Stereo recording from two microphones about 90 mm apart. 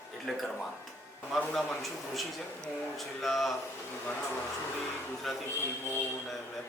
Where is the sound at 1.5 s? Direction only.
Centre (ahead or behind).